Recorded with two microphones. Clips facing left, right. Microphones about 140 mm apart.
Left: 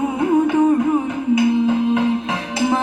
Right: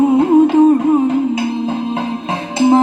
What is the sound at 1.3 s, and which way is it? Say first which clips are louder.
Music: left 2 dB; 30° right (ahead or behind).